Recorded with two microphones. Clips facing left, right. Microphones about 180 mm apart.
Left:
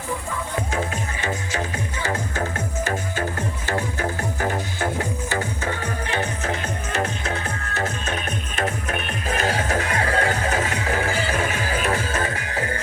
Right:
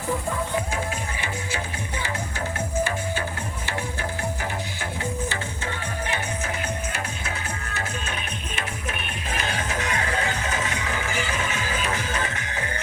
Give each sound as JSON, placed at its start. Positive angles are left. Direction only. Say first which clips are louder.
{"t": 1.5, "sound": "music", "louder": "left 4 dB", "side_deg": 45}
{"t": 8.1, "sound": "music", "louder": "left 5 dB", "side_deg": 40}